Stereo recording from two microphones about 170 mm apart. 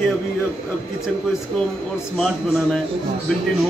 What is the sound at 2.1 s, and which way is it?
Speech, centre (ahead or behind).